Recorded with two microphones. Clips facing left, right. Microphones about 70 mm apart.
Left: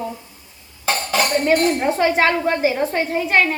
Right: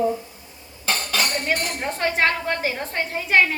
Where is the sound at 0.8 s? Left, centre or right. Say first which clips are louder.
Left 5 dB; left.